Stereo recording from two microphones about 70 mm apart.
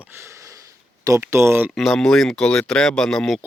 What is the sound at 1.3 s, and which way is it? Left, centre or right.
Speech, right.